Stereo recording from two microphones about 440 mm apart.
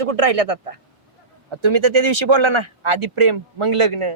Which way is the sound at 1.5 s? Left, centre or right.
Right.